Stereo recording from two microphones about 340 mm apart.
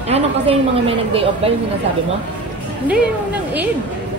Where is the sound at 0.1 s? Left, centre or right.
Centre.